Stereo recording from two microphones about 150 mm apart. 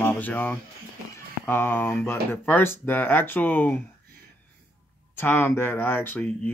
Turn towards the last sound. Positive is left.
turn(degrees=10)  # may be behind; listen again after turning